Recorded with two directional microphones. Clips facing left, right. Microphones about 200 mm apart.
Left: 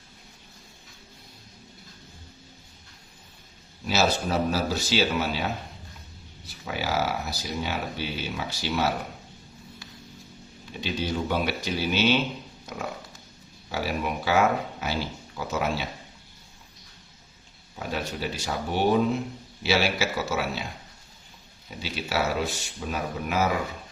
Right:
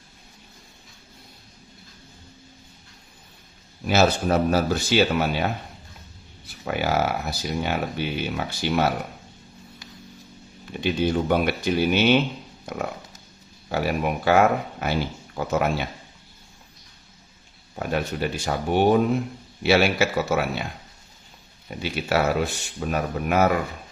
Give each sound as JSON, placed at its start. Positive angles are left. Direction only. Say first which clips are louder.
{"t": 3.8, "sound": "speech", "louder": "right 5 dB", "side_deg": -55}
{"t": 6.5, "sound": "speech", "louder": "right 5 dB", "side_deg": -55}
{"t": 10.8, "sound": "speech", "louder": "right 6 dB", "side_deg": -55}
{"t": 17.7, "sound": "speech", "louder": "right 5 dB", "side_deg": -55}
{"t": 21.7, "sound": "speech", "louder": "right 6 dB", "side_deg": -55}